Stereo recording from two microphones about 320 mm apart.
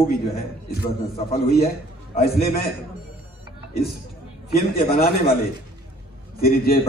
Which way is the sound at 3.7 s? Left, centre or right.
Left.